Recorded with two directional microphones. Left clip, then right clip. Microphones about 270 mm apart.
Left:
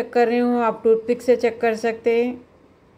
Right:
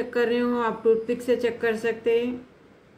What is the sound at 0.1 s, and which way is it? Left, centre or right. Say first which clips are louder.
Speech: left 6 dB; left.